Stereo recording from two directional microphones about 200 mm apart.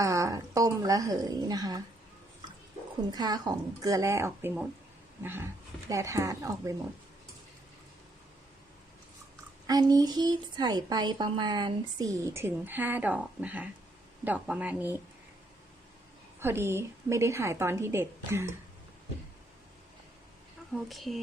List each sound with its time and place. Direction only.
0.0 s a woman's voice: 15° right (ahead or behind)
3.1 s a woman's voice: 20° right (ahead or behind)
9.6 s a woman's voice: 20° right (ahead or behind)
16.4 s a woman's voice: 10° right (ahead or behind)
20.8 s speech: centre (ahead or behind)